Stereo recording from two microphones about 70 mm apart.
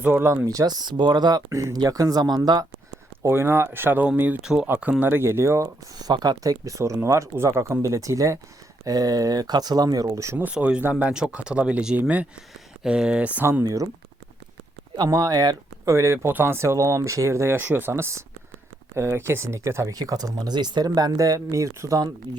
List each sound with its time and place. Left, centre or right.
0.0 s speech: right
0.4 s speech: right
3.2 s speech: right
6.0 s speech: right
8.8 s speech: right
10.8 s speech: right
11.1 s speech: centre
13.4 s speech: right
13.7 s speech: right
14.9 s speech: right
16.0 s speech: right
17.9 s speech: right
20.0 s speech: right
20.5 s speech: right